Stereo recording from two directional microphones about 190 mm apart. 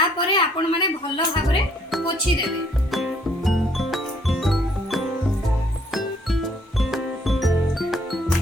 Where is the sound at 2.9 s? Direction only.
Centre (ahead or behind).